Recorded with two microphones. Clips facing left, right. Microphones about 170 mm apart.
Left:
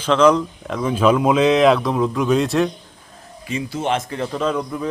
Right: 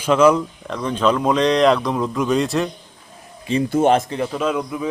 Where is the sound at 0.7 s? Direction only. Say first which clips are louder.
Left 2 dB; 5° left (ahead or behind).